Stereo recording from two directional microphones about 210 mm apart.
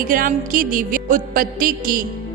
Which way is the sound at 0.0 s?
40° right (ahead or behind).